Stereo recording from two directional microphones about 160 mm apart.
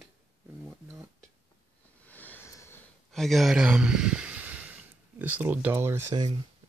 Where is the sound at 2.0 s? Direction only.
10° left (ahead or behind).